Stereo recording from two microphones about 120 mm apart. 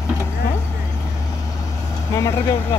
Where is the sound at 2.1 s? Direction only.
25° left (ahead or behind).